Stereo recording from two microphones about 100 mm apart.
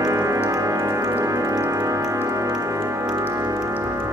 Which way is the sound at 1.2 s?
35° right (ahead or behind).